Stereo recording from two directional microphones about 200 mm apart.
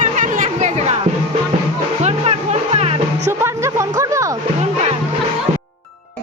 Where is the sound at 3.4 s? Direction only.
15° right (ahead or behind).